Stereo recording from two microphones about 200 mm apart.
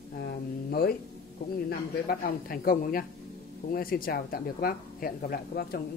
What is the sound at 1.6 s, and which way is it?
Speech, 50° left (ahead or behind).